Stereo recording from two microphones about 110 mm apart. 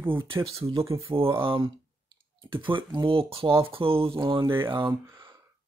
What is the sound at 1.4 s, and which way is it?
Speech, 55° right (ahead or behind).